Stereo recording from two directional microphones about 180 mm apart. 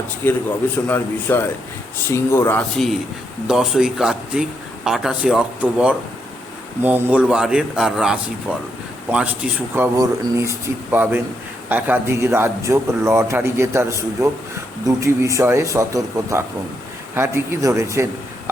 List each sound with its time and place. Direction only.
0.2 s speech: 10° left (ahead or behind)
3.4 s a man's voice: 5° right (ahead or behind)